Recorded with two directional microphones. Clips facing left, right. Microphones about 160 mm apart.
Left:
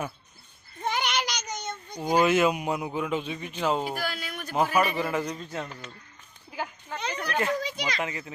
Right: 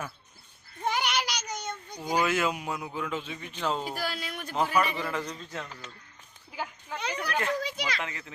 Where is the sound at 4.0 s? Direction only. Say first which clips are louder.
Left 1 dB; 30° right (ahead or behind).